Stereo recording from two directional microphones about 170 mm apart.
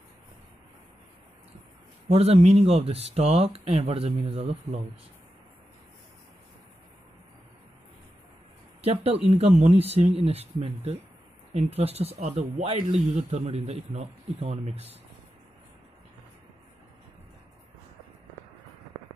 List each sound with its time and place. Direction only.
2.0 s speech: 35° right (ahead or behind)
8.8 s speech: 35° right (ahead or behind)